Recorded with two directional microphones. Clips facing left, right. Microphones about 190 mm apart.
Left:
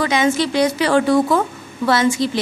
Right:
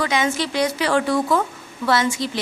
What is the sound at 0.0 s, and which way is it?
A woman's voice, 30° left (ahead or behind).